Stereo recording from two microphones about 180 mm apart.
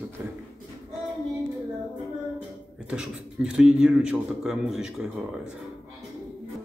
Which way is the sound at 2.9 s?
5° right (ahead or behind).